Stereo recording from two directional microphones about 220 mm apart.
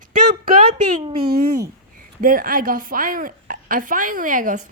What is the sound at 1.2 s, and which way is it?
A woman's voice, 45° right (ahead or behind).